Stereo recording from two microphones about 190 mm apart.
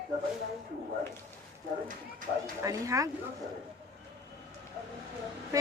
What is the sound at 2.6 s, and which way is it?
Speech, 15° right (ahead or behind).